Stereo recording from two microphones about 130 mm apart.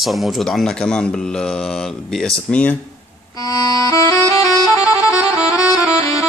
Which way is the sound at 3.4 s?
25° left (ahead or behind).